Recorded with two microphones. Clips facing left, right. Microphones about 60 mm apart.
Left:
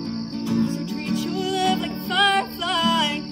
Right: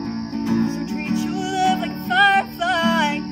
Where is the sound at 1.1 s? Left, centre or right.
Centre.